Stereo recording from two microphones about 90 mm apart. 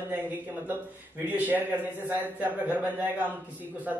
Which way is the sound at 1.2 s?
20° right (ahead or behind).